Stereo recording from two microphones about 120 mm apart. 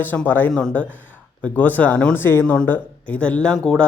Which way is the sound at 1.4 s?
15° left (ahead or behind).